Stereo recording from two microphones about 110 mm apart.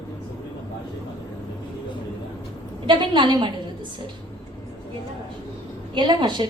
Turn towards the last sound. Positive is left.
turn(degrees=-45)  # may be behind; listen again after turning